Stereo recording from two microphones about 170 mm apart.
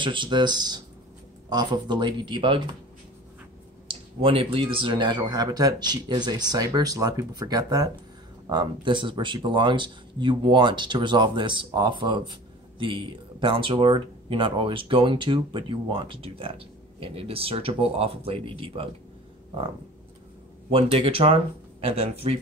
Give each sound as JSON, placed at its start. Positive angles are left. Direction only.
{"t": 0.0, "sound": "speech", "side_deg": -30}
{"t": 3.8, "sound": "speech", "side_deg": -30}
{"t": 20.7, "sound": "speech", "side_deg": -35}